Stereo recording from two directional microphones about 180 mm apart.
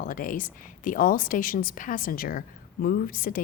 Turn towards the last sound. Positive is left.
turn(degrees=50)  # may be behind; listen again after turning